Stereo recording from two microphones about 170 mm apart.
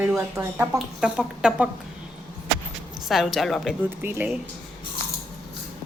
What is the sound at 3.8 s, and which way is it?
Speech, 10° right (ahead or behind).